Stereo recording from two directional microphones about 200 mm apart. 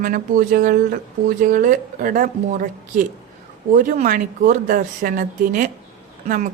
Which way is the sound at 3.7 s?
40° right (ahead or behind).